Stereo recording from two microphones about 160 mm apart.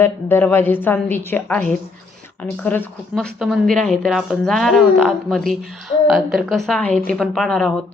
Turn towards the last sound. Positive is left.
turn(degrees=5)  # may be behind; listen again after turning